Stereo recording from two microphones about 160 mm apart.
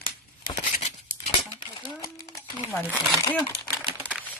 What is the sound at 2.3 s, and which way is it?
Crumpling, 20° left (ahead or behind).